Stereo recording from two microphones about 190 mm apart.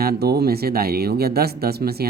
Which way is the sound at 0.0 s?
55° right (ahead or behind).